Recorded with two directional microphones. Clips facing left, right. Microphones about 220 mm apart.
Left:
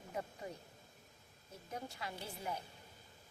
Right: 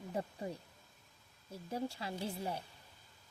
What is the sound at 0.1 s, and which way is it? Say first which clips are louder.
Speech: right 4 dB; 30° right (ahead or behind).